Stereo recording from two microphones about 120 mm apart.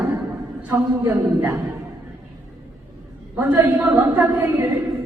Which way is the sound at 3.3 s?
15° right (ahead or behind).